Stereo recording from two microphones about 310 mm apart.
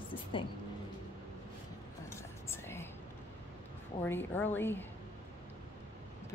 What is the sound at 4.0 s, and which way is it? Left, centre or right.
Speech, centre.